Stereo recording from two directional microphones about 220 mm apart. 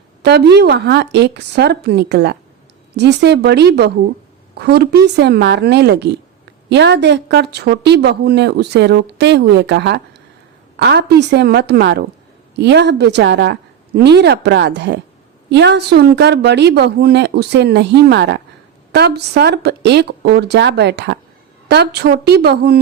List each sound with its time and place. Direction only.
0.2 s speech: 50° right (ahead or behind)